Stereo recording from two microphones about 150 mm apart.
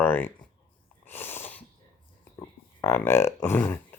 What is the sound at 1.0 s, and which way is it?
Sneeze, 15° left (ahead or behind).